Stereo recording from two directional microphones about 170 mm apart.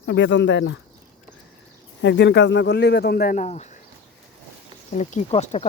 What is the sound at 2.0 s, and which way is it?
A man's voice, 90° left.